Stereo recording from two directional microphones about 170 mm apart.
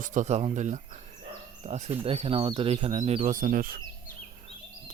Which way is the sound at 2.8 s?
45° right (ahead or behind).